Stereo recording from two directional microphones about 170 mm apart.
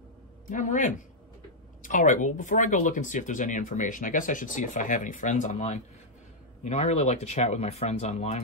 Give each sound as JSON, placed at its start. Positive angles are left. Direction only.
{"t": 0.5, "sound": "speech", "side_deg": 50}